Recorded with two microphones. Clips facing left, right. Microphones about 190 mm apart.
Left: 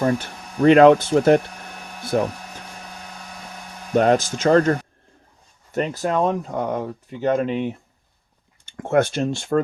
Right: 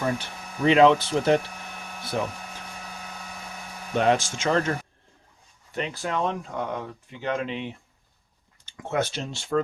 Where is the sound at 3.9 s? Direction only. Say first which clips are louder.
Left 5 dB; 45° left (ahead or behind).